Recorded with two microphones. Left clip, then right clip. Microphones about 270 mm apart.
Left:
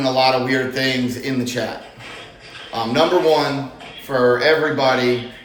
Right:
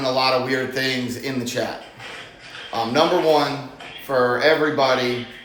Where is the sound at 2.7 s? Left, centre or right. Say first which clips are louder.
Even; centre.